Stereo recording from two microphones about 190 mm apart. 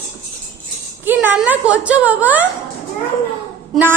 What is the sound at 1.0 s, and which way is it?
A woman's voice, 10° right (ahead or behind).